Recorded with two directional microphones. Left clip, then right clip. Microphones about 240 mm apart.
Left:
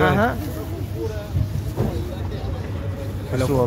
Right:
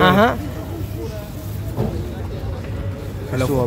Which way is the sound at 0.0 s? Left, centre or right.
Right.